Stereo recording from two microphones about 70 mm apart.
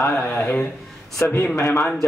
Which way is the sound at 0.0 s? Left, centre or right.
Left.